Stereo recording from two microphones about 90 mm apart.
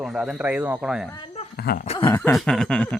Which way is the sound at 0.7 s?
5° right (ahead or behind).